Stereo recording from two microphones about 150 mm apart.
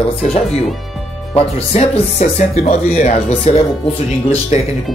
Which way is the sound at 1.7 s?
45° left (ahead or behind).